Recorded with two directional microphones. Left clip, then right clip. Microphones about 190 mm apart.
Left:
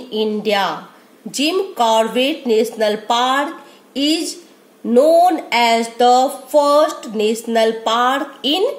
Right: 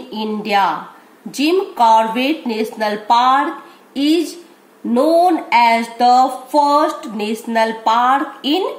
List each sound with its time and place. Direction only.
0.1 s a woman's voice: 20° left (ahead or behind)